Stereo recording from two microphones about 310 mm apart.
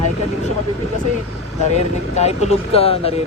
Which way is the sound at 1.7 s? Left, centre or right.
Left.